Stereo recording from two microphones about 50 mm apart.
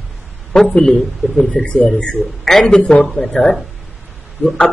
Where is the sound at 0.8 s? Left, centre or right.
Centre.